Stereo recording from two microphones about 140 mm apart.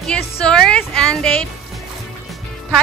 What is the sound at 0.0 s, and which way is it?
A woman's voice, 5° left (ahead or behind).